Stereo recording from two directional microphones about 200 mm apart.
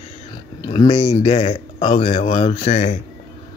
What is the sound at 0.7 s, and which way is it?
Speech, 25° left (ahead or behind).